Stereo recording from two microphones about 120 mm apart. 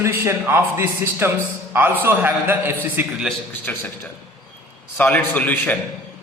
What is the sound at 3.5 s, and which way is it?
A man's voice, 15° left (ahead or behind).